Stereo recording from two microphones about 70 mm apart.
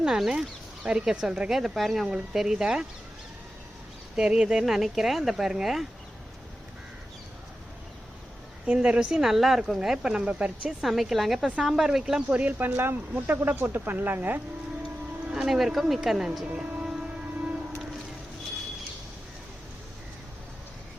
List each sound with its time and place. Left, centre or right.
0.0 s speech: centre
4.1 s speech: centre
8.6 s speech: centre
12.4 s speech: right
15.3 s speech: centre
16.6 s music: centre